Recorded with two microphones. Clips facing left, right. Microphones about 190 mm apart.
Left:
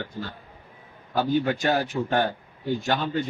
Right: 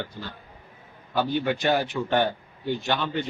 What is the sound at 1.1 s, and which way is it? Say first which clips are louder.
A man's voice: left 2 dB; 40° left (ahead or behind).